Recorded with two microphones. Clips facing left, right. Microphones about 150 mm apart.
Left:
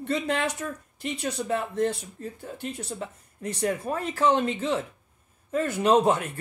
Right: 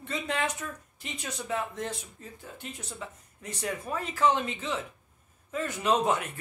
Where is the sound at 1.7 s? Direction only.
45° left (ahead or behind).